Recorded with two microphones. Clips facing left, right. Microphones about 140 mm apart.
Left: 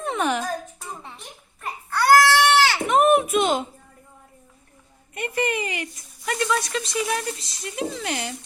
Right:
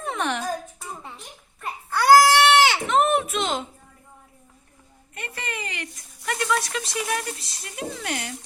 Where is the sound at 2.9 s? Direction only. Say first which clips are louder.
Left 3 dB; 15° left (ahead or behind).